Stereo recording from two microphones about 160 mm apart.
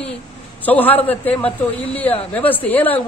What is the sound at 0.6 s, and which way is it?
A man's voice, 10° left (ahead or behind).